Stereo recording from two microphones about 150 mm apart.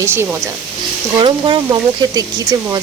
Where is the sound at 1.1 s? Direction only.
35° right (ahead or behind).